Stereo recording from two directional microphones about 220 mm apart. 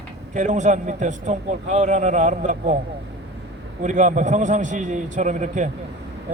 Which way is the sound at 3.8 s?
35° right (ahead or behind).